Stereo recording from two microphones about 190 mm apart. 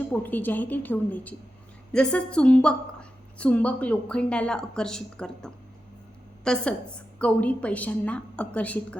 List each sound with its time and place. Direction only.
0.1 s a woman's voice: 10° left (ahead or behind)